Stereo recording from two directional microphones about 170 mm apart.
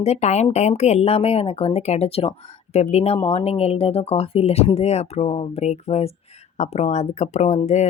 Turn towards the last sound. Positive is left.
turn(degrees=40)  # may be behind; listen again after turning